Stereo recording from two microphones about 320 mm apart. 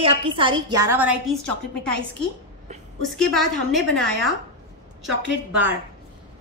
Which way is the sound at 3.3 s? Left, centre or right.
Centre.